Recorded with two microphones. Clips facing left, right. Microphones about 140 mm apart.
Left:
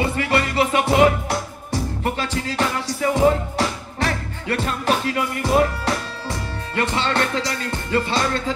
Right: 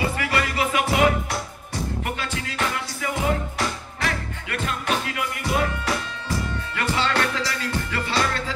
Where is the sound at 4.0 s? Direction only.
35° left (ahead or behind).